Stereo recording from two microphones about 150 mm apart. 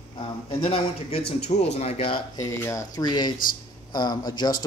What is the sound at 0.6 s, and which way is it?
A man's voice, 35° left (ahead or behind).